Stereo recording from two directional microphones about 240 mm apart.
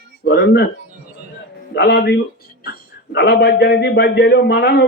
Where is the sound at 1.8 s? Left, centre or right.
Left.